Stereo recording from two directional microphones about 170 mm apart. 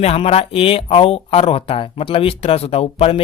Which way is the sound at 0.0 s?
35° left (ahead or behind).